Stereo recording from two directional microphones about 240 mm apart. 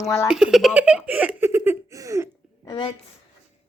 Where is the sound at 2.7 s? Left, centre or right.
Left.